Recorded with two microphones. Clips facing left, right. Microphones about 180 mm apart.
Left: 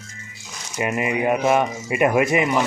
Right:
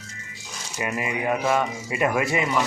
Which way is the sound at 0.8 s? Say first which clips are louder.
Left 5 dB; 20° left (ahead or behind).